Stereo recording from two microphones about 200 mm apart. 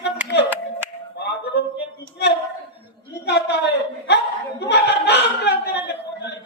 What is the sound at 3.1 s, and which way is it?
Chuckle, 60° left (ahead or behind).